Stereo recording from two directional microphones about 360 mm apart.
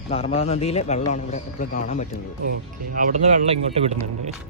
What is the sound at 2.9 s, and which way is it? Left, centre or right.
Speech, right.